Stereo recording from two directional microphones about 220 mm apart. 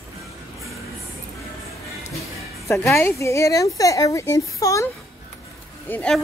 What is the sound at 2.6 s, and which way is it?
Speech, 10° left (ahead or behind).